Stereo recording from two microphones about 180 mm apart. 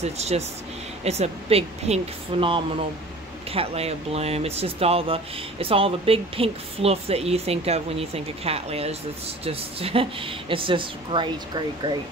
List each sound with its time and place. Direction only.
0.0 s speech: 35° right (ahead or behind)
3.5 s speech: 35° right (ahead or behind)